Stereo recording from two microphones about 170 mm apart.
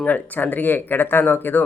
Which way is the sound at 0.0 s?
10° left (ahead or behind).